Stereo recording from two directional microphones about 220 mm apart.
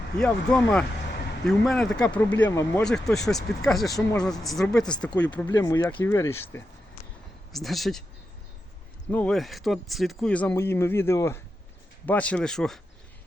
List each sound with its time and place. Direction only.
0.2 s speech: 5° left (ahead or behind)
3.9 s speech: 15° left (ahead or behind)
4.3 s speech: centre (ahead or behind)
5.5 s speech: 15° left (ahead or behind)
7.5 s speech: centre (ahead or behind)
9.0 s speech: 5° left (ahead or behind)